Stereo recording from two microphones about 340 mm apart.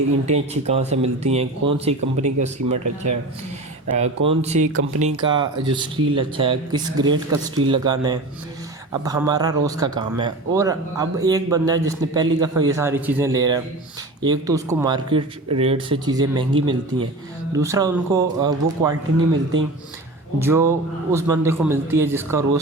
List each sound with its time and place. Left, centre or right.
0.3 s speech: centre
4.6 s speech: right
4.9 s speech: centre
20.4 s speech: centre